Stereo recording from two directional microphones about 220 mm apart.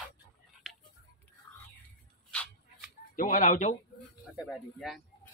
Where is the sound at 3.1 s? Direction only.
35° left (ahead or behind).